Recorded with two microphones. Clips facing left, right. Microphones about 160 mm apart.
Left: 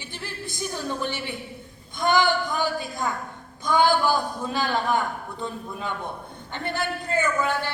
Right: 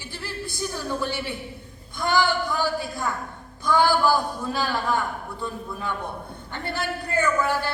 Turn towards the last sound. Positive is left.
turn(degrees=20)  # may be behind; listen again after turning